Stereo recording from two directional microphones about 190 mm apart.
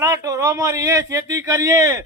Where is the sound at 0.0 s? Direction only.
15° right (ahead or behind).